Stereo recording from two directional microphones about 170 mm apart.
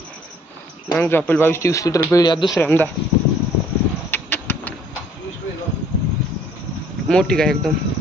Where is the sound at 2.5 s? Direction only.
10° left (ahead or behind).